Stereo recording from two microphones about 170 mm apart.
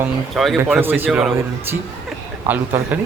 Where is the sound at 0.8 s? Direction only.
10° right (ahead or behind).